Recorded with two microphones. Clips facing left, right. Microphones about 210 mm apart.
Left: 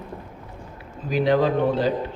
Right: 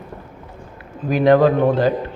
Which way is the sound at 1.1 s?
55° right (ahead or behind).